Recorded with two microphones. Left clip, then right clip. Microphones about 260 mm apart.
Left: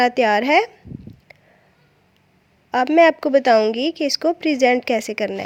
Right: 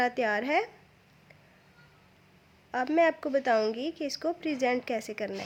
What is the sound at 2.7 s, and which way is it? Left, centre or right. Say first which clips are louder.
A woman's voice: left 12 dB; left.